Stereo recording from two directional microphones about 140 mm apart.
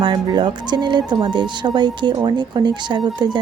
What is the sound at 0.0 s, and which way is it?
Speech, 30° right (ahead or behind).